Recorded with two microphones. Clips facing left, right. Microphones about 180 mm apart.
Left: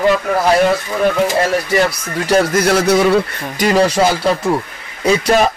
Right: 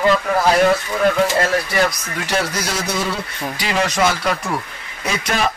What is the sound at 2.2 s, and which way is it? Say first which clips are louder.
Speech: left 9 dB; 40° left (ahead or behind).